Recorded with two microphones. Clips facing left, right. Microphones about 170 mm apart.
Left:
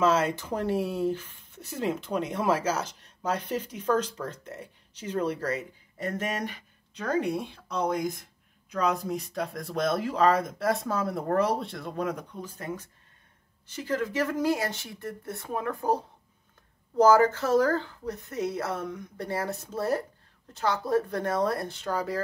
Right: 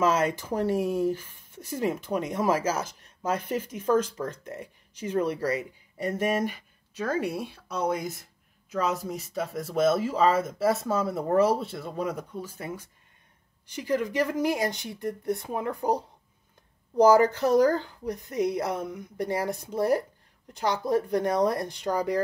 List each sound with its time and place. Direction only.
0.3 s speech: 10° right (ahead or behind)